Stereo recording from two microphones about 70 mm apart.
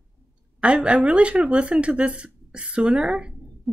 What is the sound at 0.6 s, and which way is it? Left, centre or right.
Speech, centre.